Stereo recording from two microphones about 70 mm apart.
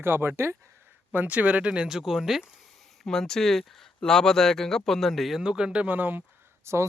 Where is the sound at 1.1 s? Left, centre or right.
Right; by 2.5 s centre.